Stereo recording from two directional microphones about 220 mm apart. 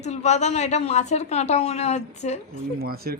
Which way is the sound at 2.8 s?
45° right (ahead or behind).